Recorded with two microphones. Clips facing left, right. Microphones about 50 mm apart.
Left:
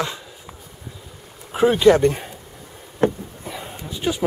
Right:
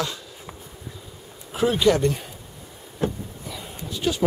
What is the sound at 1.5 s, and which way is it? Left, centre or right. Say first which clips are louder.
Speech: left 5 dB; left.